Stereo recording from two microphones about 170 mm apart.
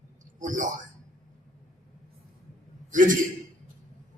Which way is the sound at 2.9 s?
50° right (ahead or behind).